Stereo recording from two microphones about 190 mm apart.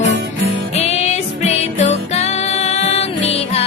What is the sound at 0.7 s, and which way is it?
Music, 35° left (ahead or behind).